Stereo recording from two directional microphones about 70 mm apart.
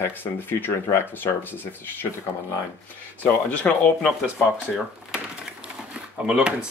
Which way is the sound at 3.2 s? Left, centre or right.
Left.